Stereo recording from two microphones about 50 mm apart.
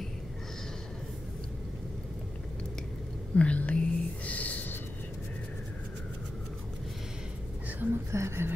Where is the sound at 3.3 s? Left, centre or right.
Left.